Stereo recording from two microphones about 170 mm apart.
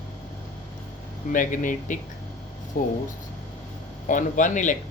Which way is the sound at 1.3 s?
50° left (ahead or behind).